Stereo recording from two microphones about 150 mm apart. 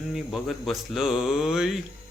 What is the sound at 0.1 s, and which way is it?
Speech, centre (ahead or behind).